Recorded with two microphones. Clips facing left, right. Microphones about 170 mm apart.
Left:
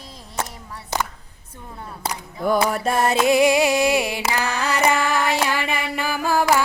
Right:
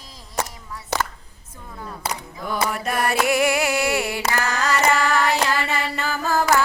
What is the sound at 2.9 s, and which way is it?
Music, 25° left (ahead or behind).